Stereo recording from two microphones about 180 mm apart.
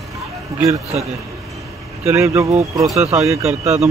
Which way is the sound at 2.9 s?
35° right (ahead or behind).